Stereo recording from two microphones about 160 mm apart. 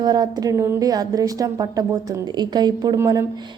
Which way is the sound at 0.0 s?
25° right (ahead or behind).